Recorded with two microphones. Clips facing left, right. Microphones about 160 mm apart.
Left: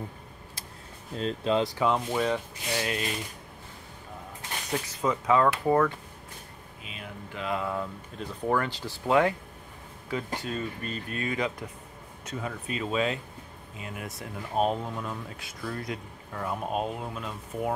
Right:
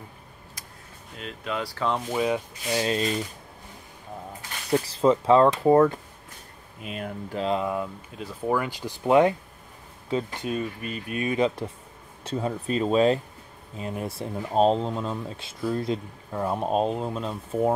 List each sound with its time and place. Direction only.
1.1 s speech: 30° left (ahead or behind)
2.0 s speech: 5° right (ahead or behind)
2.7 s speech: 25° right (ahead or behind)
4.6 s speech: 30° right (ahead or behind)
6.8 s speech: 50° right (ahead or behind)
7.3 s speech: 25° right (ahead or behind)